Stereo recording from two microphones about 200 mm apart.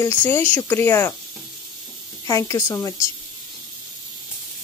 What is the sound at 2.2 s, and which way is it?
Speech, 15° left (ahead or behind).